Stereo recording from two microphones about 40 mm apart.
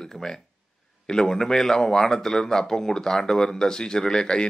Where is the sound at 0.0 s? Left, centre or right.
Centre.